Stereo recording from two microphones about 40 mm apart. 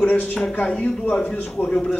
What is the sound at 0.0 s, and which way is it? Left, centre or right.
A man's voice, left.